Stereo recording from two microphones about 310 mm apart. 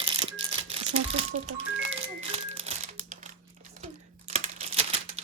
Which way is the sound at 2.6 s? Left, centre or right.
Right.